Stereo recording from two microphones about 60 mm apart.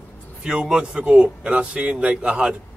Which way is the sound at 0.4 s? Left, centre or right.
Centre.